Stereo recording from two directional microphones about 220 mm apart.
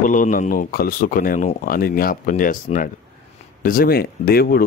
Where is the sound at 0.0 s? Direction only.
35° left (ahead or behind).